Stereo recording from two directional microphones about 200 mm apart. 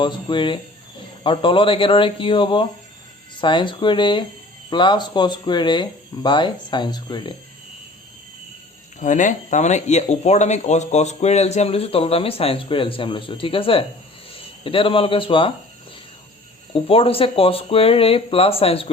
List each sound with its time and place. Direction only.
0.0 s speech: 25° left (ahead or behind)
9.0 s speech: 40° left (ahead or behind)
16.7 s speech: 30° left (ahead or behind)